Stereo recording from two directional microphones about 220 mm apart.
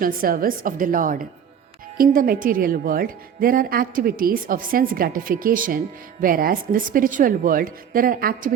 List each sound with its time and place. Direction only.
0.0 s a woman's voice: 40° right (ahead or behind)